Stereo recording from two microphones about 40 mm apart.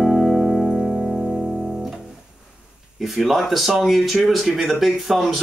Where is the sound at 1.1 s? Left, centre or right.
Right.